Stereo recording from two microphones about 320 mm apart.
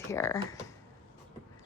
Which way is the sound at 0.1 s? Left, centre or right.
Centre.